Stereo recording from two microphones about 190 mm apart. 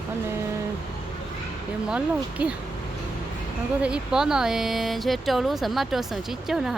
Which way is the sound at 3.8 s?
5° right (ahead or behind).